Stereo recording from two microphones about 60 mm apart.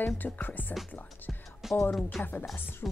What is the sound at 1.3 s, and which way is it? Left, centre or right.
Music, centre.